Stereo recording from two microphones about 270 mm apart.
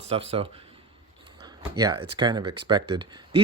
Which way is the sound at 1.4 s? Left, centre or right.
Centre.